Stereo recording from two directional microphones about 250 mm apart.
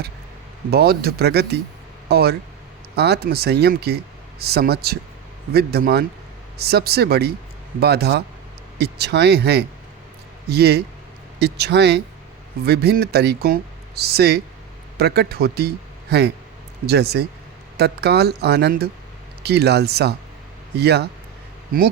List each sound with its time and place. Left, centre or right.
0.7 s speech: right
2.0 s a sound: right
2.9 s a man's voice: right